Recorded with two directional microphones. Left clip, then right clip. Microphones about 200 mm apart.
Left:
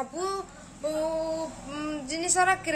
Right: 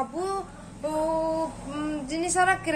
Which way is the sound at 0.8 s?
Centre (ahead or behind).